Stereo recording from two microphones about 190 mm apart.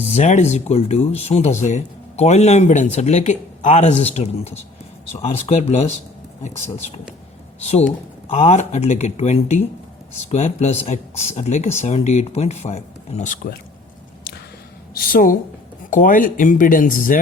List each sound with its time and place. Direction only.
0.0 s speech: 35° left (ahead or behind)
14.9 s speech: 50° left (ahead or behind)